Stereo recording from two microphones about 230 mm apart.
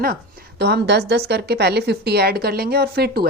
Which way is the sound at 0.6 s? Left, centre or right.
Right.